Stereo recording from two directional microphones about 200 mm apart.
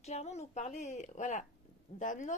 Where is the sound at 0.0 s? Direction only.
35° left (ahead or behind).